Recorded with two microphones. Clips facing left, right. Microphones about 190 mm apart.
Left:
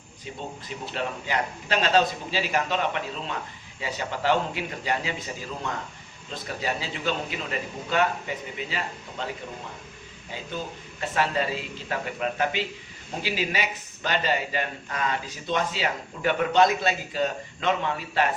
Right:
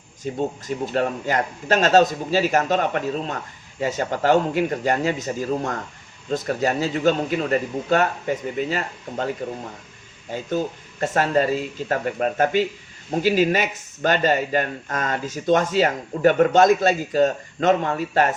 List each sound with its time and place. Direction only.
0.3 s speech: 45° right (ahead or behind)